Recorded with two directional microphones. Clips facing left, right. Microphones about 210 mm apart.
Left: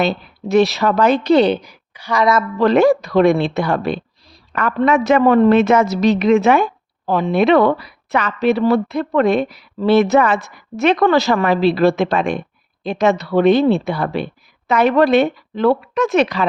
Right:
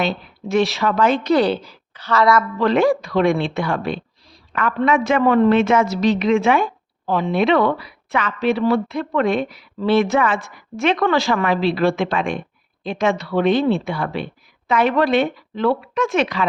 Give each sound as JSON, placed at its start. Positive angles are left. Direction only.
{"t": 0.0, "sound": "speech", "side_deg": 40}
{"t": 1.3, "sound": "a woman's voice", "side_deg": 20}
{"t": 2.6, "sound": "a woman's voice", "side_deg": 40}